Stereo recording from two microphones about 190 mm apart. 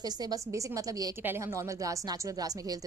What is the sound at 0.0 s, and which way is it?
A woman's voice, 20° right (ahead or behind).